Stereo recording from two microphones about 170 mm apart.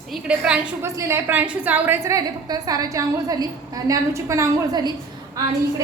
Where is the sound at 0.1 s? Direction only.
5° right (ahead or behind).